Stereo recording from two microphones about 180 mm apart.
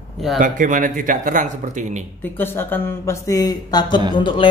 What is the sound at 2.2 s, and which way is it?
Speech, 10° left (ahead or behind).